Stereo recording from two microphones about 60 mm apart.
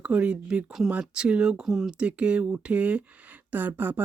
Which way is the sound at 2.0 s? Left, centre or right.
Centre.